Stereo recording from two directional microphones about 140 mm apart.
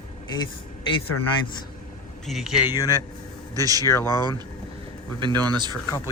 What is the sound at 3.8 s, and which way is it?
Speech, 20° left (ahead or behind).